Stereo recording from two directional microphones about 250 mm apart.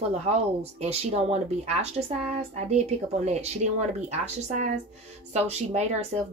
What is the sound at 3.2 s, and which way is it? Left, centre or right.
Speech, right.